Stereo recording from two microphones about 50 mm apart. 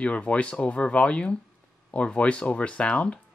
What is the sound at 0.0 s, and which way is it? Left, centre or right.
Speech, left.